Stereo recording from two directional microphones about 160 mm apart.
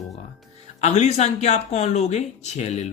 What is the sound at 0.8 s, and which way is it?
Speech, 45° left (ahead or behind).